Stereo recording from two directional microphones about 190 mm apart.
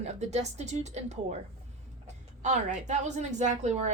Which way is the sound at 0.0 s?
35° right (ahead or behind).